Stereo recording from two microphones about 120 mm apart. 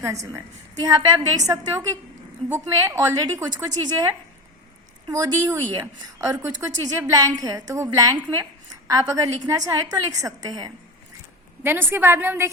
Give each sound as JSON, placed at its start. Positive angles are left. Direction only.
{"t": 0.0, "sound": "a woman's voice", "side_deg": -25}
{"t": 5.0, "sound": "a woman's voice", "side_deg": -30}
{"t": 11.6, "sound": "a woman's voice", "side_deg": -20}